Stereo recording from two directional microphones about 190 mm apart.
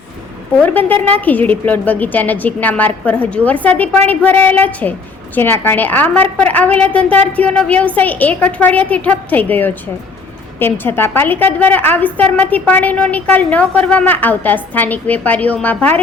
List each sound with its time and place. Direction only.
0.6 s a woman's voice: 10° left (ahead or behind)